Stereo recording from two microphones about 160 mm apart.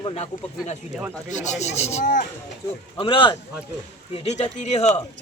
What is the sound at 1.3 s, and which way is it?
Speech, 50° left (ahead or behind).